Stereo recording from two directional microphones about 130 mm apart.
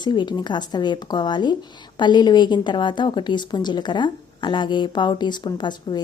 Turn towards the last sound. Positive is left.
turn(degrees=35)  # may be behind; listen again after turning